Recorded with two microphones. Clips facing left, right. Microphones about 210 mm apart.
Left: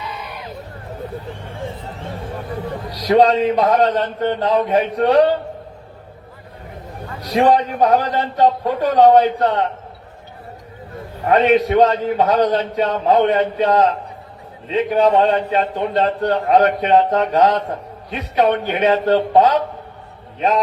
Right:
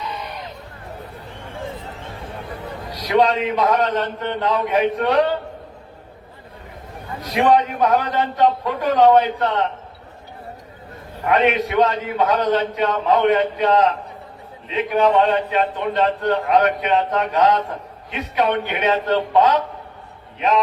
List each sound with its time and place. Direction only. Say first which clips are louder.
2.9 s a man's voice: left 4 dB; 35° left (ahead or behind)
7.2 s a man's voice: left 2 dB; 35° left (ahead or behind)
11.3 s a man's voice: left 4 dB; 35° left (ahead or behind)